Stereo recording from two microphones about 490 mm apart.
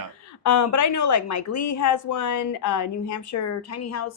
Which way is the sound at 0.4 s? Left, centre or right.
Left.